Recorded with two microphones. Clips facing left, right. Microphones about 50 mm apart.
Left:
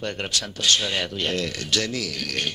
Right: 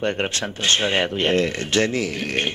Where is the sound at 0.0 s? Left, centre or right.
Right.